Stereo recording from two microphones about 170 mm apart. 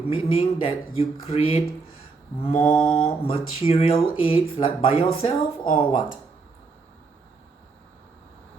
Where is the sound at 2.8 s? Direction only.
30° left (ahead or behind).